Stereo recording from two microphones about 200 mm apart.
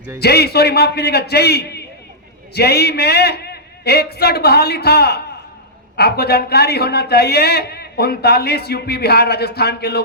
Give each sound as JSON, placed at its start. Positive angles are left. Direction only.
{"t": 0.2, "sound": "a man's voice", "side_deg": 55}